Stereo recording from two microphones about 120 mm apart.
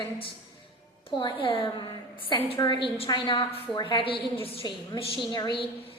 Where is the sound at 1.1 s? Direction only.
45° left (ahead or behind).